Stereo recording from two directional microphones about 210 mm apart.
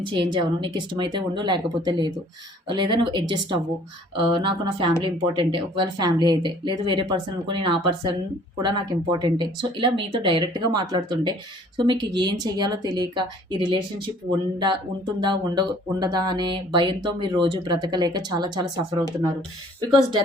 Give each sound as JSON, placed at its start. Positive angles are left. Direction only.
{"t": 0.0, "sound": "speech", "side_deg": -25}